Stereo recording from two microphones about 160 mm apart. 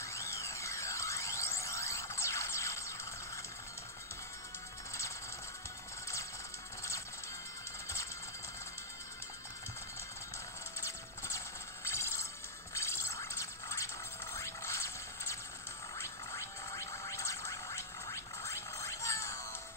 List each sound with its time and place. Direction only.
0.0 s music: 20° left (ahead or behind)
10.8 s music: 15° left (ahead or behind)
12.7 s a sound: 15° left (ahead or behind)